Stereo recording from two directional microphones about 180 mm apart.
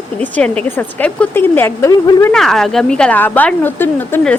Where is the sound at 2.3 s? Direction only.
Centre (ahead or behind).